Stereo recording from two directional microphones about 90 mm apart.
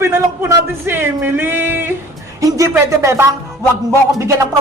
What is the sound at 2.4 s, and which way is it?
Speech, 40° right (ahead or behind).